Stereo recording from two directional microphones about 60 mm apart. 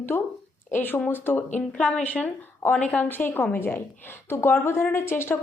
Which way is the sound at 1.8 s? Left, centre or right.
Left.